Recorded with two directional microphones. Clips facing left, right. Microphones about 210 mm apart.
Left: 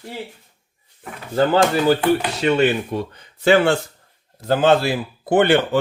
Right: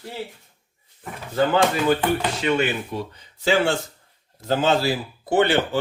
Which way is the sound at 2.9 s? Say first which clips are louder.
Left 4 dB; 60° left (ahead or behind).